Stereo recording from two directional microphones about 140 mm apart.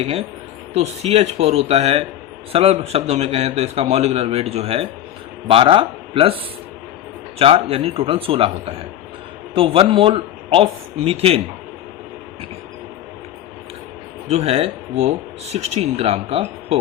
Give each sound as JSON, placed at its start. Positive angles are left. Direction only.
{"t": 0.7, "sound": "a man's voice", "side_deg": -50}
{"t": 14.3, "sound": "a man's voice", "side_deg": -50}